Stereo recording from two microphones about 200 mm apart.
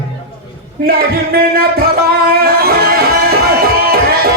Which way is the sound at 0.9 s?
50° right (ahead or behind).